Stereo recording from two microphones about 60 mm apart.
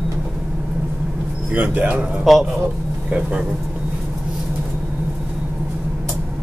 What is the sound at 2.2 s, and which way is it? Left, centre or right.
Speech, centre.